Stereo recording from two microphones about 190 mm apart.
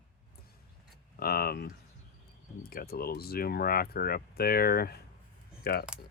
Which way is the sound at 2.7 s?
55° left (ahead or behind).